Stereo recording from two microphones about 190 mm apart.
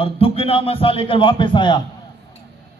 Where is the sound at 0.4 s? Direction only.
30° left (ahead or behind).